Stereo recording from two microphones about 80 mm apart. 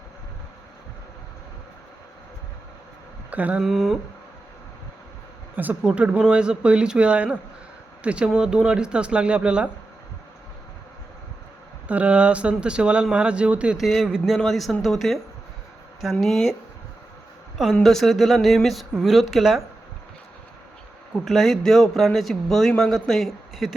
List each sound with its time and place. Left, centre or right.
3.2 s speech: centre
3.6 s speech: centre
5.5 s speech: centre
11.9 s speech: centre
13.7 s speech: centre
16.2 s speech: centre
17.8 s speech: centre
21.2 s speech: centre